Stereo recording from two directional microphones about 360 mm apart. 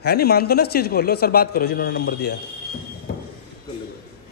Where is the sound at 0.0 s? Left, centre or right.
Left.